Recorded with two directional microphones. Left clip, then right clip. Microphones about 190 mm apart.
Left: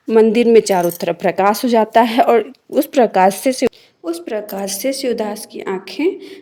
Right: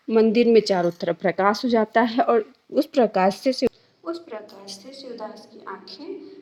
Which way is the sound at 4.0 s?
15° left (ahead or behind).